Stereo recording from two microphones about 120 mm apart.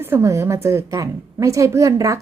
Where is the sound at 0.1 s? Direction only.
25° right (ahead or behind).